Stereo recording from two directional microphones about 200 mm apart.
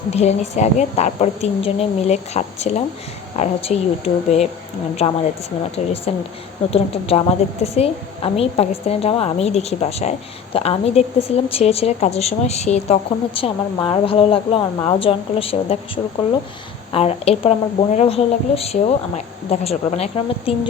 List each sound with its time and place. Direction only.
0.1 s a woman's voice: 35° left (ahead or behind)
16.9 s a woman's voice: 30° left (ahead or behind)